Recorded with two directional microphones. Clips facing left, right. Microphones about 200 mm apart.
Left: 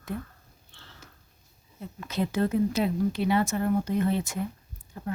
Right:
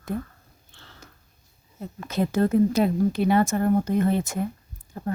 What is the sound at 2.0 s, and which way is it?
Speech, 45° right (ahead or behind).